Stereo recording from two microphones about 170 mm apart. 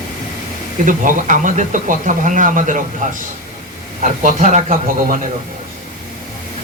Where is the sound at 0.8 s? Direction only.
50° right (ahead or behind).